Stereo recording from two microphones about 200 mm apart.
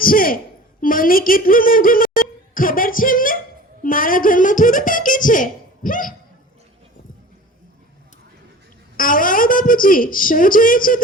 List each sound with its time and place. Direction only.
0.0 s a woman's voice: 45° left (ahead or behind)
9.0 s a woman's voice: 45° left (ahead or behind)